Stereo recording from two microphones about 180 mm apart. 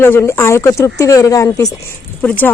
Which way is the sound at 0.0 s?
15° left (ahead or behind).